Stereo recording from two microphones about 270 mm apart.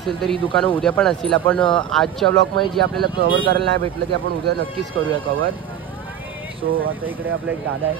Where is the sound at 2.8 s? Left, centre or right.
Right.